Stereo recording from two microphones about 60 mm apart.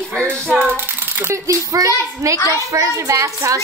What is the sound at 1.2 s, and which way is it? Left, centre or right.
A child's voice, right.